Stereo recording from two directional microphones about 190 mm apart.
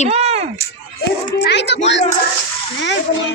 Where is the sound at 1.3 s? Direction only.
65° left (ahead or behind).